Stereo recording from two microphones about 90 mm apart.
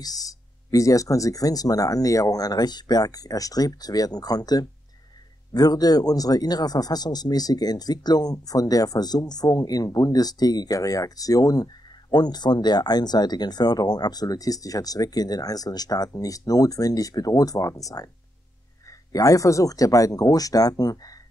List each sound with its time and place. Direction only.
0.0 s speech: 45° left (ahead or behind)